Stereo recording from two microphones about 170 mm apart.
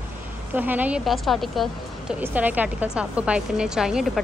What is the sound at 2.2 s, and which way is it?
A woman's voice, 10° right (ahead or behind).